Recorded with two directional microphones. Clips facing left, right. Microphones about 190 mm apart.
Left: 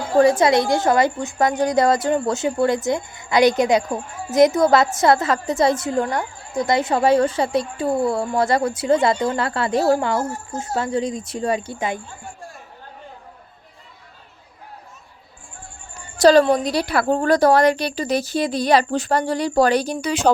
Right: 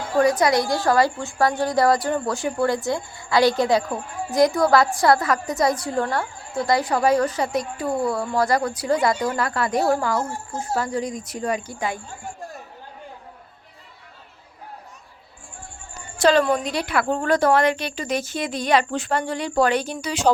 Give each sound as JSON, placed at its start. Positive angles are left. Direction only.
{"t": 0.2, "sound": "a woman's voice", "side_deg": 25}
{"t": 16.1, "sound": "a woman's voice", "side_deg": 40}